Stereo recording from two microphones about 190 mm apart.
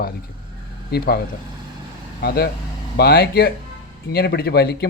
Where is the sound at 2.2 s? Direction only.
55° left (ahead or behind).